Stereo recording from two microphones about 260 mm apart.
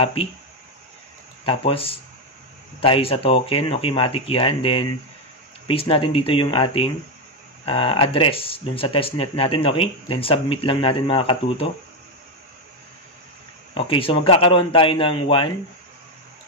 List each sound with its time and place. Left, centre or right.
0.0 s speech: left
1.4 s speech: left
13.7 s speech: left